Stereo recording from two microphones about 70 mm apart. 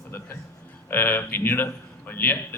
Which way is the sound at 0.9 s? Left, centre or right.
Left.